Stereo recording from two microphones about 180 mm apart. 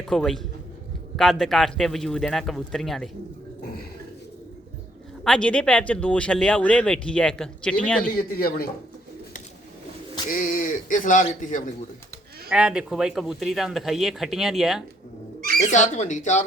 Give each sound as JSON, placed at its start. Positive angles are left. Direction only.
{"t": 0.1, "sound": "speech", "side_deg": 0}
{"t": 5.2, "sound": "speech", "side_deg": 5}
{"t": 8.4, "sound": "speech", "side_deg": 55}
{"t": 10.2, "sound": "speech", "side_deg": 50}
{"t": 12.5, "sound": "speech", "side_deg": -5}
{"t": 15.6, "sound": "speech", "side_deg": 40}